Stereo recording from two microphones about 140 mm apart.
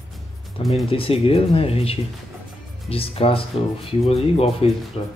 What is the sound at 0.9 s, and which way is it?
Speech, 40° left (ahead or behind).